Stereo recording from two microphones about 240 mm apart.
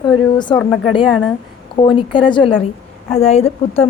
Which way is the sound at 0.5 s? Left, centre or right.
Centre.